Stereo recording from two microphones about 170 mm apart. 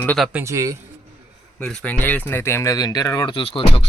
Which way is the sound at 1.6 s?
5° left (ahead or behind).